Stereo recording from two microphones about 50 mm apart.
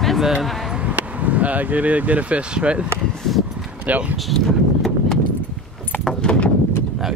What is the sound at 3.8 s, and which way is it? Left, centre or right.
Speech, right.